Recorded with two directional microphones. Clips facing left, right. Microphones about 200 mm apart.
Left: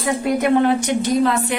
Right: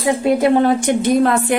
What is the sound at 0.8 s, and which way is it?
Speech, 55° right (ahead or behind).